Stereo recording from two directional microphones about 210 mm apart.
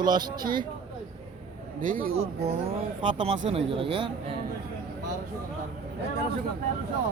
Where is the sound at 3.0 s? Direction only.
25° right (ahead or behind).